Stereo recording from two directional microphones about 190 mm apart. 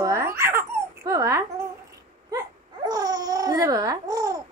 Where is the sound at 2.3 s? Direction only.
20° right (ahead or behind).